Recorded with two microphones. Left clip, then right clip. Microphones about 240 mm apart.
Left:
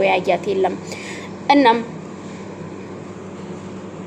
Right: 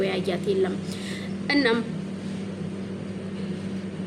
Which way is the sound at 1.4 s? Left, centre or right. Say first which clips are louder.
Left 10 dB; centre.